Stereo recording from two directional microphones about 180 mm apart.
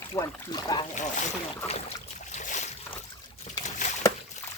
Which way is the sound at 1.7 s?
35° left (ahead or behind).